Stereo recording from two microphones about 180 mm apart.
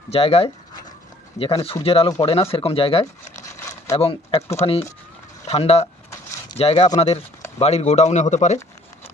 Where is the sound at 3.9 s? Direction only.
30° left (ahead or behind).